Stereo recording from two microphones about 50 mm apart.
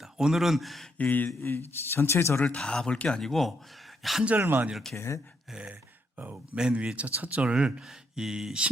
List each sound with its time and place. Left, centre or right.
0.0 s speech: centre
0.9 s speech: left
1.3 s speech: left
1.5 s speech: left
2.6 s speech: centre
4.4 s speech: right
4.9 s speech: left
5.5 s speech: centre
6.1 s speech: right
6.7 s speech: right
7.5 s speech: centre